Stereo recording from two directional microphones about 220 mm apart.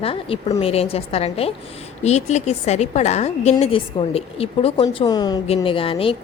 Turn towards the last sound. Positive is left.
turn(degrees=25)  # may be behind; listen again after turning